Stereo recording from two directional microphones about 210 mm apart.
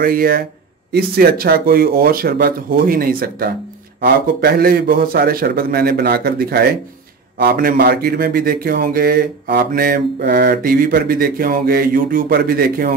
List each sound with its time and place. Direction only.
0.0 s speech: 45° right (ahead or behind)